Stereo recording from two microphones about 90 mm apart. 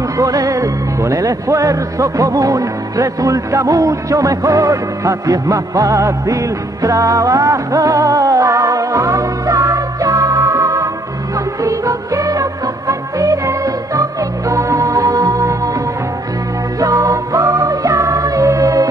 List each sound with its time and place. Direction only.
0.2 s music: 40° right (ahead or behind)
16.8 s music: 40° right (ahead or behind)